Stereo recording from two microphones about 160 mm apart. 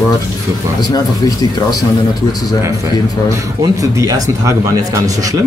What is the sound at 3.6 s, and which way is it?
Speech, 20° right (ahead or behind).